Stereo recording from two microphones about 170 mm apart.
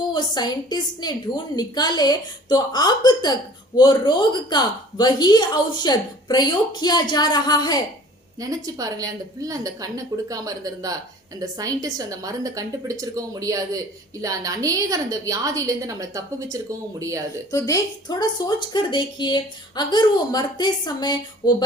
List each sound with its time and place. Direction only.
0.1 s a woman's voice: 25° left (ahead or behind)
8.4 s a woman's voice: 20° right (ahead or behind)
17.5 s a woman's voice: 20° left (ahead or behind)